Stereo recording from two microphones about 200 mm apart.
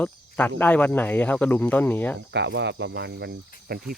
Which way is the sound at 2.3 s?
60° right (ahead or behind).